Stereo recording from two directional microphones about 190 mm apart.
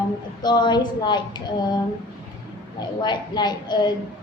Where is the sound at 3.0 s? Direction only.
20° left (ahead or behind).